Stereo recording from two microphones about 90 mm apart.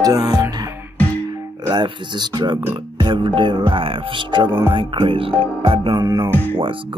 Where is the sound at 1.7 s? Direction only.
55° right (ahead or behind).